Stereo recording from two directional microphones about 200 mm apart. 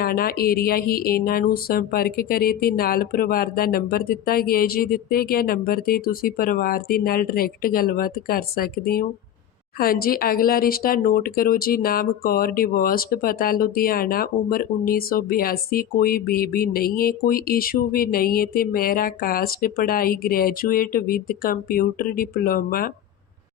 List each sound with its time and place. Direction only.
0.0 s speech: 45° left (ahead or behind)